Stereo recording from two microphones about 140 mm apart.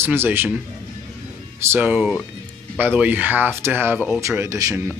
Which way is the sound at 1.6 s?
15° right (ahead or behind).